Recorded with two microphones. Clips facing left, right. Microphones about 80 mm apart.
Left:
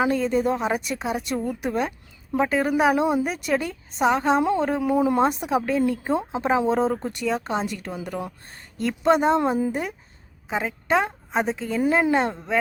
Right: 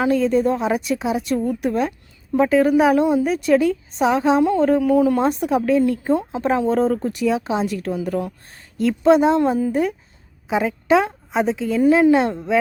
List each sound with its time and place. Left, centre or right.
0.0 s speech: centre
4.8 s speech: left
5.2 s speech: centre
10.6 s a woman's voice: centre